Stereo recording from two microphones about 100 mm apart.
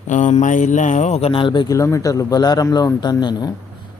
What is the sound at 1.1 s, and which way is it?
Speech, 75° left (ahead or behind).